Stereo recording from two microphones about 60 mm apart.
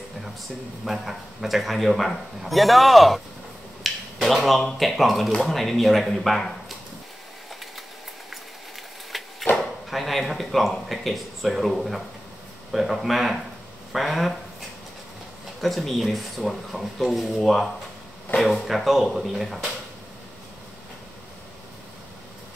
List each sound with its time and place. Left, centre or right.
0.8 s a man's voice: centre
3.8 s finger snapping: centre
4.7 s a man's voice: centre
9.1 s a sound: centre
9.8 s a man's voice: centre
15.6 s a man's voice: centre